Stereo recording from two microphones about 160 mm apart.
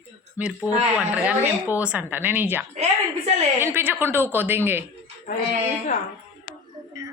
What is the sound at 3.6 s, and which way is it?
A woman's voice, 15° right (ahead or behind).